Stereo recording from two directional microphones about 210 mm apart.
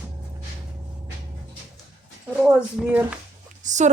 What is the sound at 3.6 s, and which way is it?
Speech, 35° right (ahead or behind).